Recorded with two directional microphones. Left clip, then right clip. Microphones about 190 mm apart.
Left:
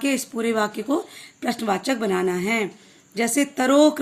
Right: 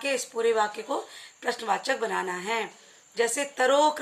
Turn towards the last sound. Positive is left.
turn(degrees=40)  # may be behind; listen again after turning